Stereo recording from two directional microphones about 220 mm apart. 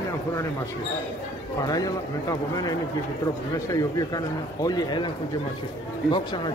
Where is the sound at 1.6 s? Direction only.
15° left (ahead or behind).